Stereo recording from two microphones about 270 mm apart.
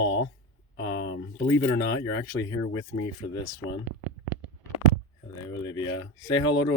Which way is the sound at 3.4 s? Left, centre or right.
Centre.